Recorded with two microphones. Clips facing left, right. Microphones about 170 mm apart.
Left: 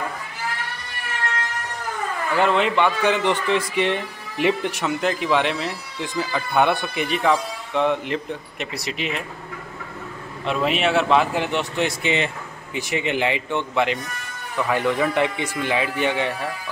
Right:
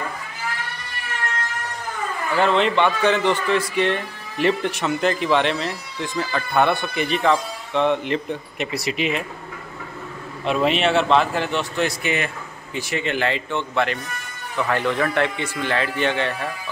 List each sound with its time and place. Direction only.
2.4 s a man's voice: 10° left (ahead or behind)
10.4 s a man's voice: centre (ahead or behind)